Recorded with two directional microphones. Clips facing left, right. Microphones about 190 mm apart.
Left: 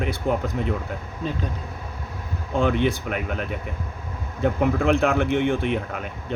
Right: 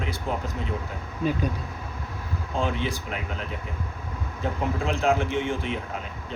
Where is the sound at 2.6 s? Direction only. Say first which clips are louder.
Left 7 dB; 60° left (ahead or behind).